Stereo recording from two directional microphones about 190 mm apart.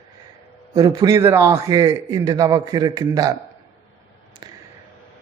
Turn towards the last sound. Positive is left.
turn(degrees=-25)  # may be behind; listen again after turning